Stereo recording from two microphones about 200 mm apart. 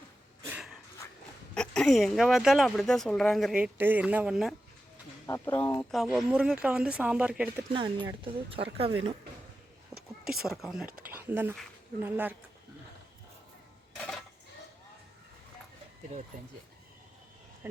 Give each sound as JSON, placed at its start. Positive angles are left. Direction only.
{"t": 0.5, "sound": "a sound", "side_deg": 0}
{"t": 1.5, "sound": "speech", "side_deg": 5}
{"t": 5.2, "sound": "speech", "side_deg": 15}
{"t": 6.0, "sound": "speech", "side_deg": -5}
{"t": 7.7, "sound": "speech", "side_deg": -25}
{"t": 10.4, "sound": "speech", "side_deg": 0}
{"t": 13.9, "sound": "a sound", "side_deg": 0}